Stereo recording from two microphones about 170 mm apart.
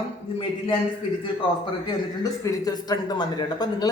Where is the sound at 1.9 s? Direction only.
20° left (ahead or behind).